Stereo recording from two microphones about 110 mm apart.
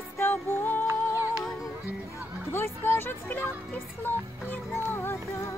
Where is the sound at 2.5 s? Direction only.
20° left (ahead or behind).